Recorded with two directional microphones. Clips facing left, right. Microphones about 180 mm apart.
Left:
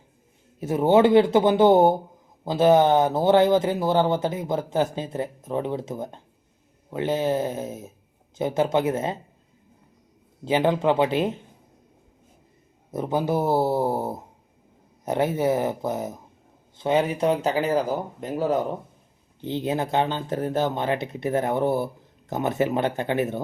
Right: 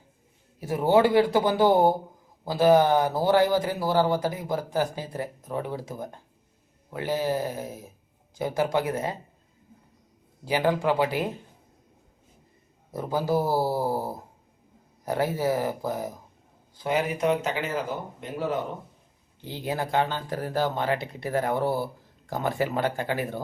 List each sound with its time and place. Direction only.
0.6 s speech: 20° left (ahead or behind)
10.4 s speech: 20° left (ahead or behind)
12.9 s speech: 20° left (ahead or behind); by 18.8 s 40° left (ahead or behind)
19.5 s speech: 20° left (ahead or behind)